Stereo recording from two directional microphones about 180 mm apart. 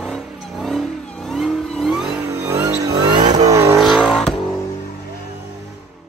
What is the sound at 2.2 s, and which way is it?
Music, 15° right (ahead or behind).